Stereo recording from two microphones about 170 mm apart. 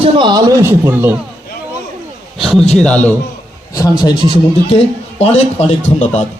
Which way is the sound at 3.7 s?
25° left (ahead or behind).